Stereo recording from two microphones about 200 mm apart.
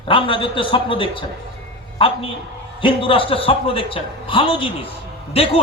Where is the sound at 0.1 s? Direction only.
25° left (ahead or behind).